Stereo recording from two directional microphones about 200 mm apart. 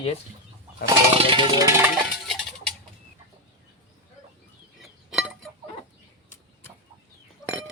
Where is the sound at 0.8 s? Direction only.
25° right (ahead or behind).